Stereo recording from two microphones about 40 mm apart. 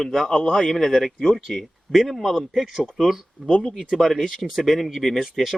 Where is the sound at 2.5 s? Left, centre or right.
Centre.